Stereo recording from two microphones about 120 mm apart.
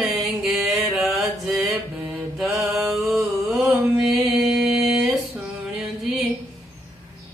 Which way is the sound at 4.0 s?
5° right (ahead or behind).